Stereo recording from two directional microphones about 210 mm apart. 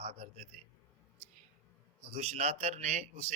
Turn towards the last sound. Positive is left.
turn(degrees=-30)  # may be behind; listen again after turning